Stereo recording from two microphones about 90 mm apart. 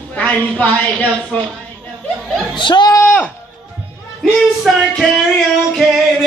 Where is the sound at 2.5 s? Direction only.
60° left (ahead or behind).